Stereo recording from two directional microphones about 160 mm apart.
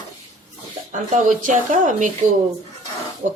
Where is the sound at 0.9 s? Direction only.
55° right (ahead or behind).